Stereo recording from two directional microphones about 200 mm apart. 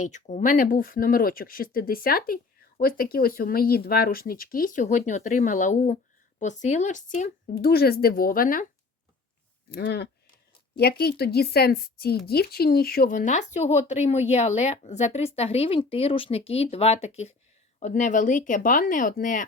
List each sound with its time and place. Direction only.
0.0 s speech: 40° left (ahead or behind)
9.6 s speech: 55° left (ahead or behind)